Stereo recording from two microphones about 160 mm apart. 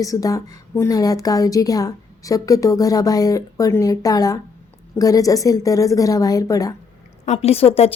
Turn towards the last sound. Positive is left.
turn(degrees=40)  # may be behind; listen again after turning